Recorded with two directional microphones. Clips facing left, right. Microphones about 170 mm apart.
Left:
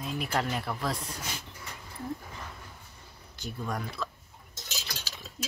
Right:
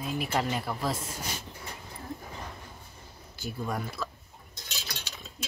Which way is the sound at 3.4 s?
5° right (ahead or behind).